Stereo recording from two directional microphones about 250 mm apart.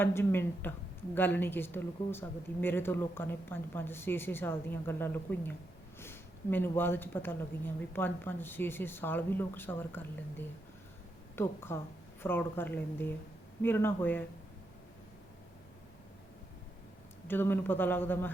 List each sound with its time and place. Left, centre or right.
0.0 s speech: centre
17.2 s speech: centre